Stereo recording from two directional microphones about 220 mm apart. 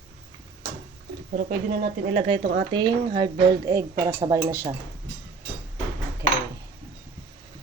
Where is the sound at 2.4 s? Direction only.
40° right (ahead or behind).